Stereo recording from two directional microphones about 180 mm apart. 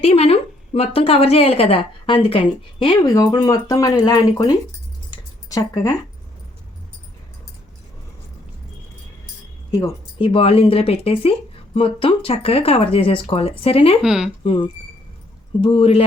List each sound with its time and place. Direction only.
0.0 s a woman's voice: 35° left (ahead or behind)
9.7 s speech: 25° left (ahead or behind)
14.0 s speech: 5° right (ahead or behind)
14.4 s a woman's voice: 30° left (ahead or behind)